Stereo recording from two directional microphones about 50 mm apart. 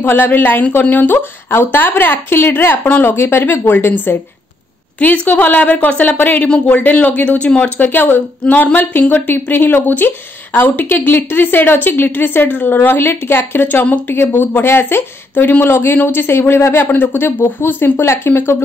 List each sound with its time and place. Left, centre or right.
0.0 s a woman's voice: left
5.0 s a woman's voice: left
7.8 s a woman's voice: left